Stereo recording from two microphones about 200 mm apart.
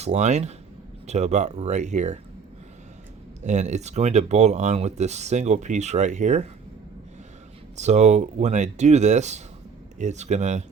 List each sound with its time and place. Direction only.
0.0 s speech: 35° right (ahead or behind)
3.4 s speech: 35° right (ahead or behind)
7.8 s speech: 35° right (ahead or behind)